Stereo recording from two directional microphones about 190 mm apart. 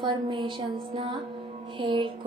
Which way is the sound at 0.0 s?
25° right (ahead or behind).